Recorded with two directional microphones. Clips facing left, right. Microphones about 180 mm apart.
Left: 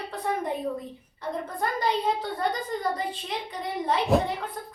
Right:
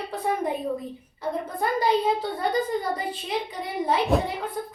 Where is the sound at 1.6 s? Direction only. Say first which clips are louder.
Right 4 dB; 10° right (ahead or behind).